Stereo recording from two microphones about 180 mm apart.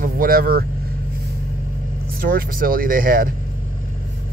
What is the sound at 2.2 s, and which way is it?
Speech, 50° right (ahead or behind).